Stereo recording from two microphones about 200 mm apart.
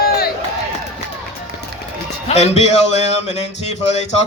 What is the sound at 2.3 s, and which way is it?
A man's voice, 30° left (ahead or behind).